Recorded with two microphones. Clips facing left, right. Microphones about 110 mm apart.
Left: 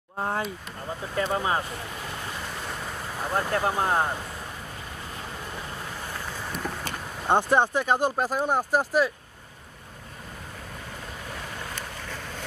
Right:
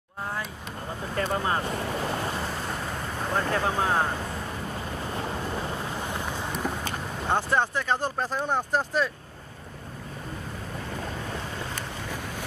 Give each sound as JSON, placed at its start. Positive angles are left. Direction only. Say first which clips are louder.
{"t": 0.2, "sound": "speech", "louder": "left 5 dB", "side_deg": 35}
{"t": 1.1, "sound": "speech", "louder": "left 1 dB", "side_deg": 10}
{"t": 3.3, "sound": "speech", "louder": "left 1 dB", "side_deg": 10}
{"t": 6.0, "sound": "boat", "louder": "right 3 dB", "side_deg": -20}
{"t": 7.2, "sound": "speech", "louder": "left 4 dB", "side_deg": 15}